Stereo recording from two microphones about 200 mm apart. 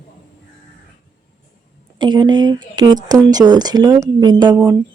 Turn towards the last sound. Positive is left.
turn(degrees=-20)  # may be behind; listen again after turning